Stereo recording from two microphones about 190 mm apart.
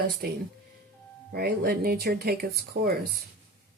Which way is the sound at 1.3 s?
55° right (ahead or behind).